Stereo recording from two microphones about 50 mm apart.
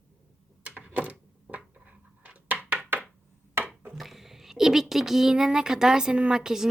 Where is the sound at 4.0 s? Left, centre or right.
Centre.